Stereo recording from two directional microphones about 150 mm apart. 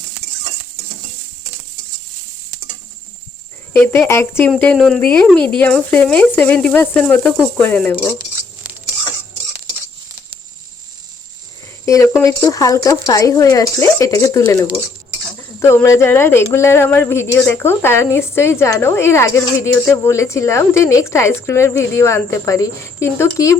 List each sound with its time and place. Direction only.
3.7 s speech: 15° left (ahead or behind)
4.5 s speech: 5° left (ahead or behind)
11.9 s a woman's voice: 20° left (ahead or behind)